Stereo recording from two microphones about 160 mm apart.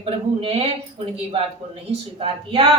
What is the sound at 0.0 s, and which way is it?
Speech, 35° right (ahead or behind).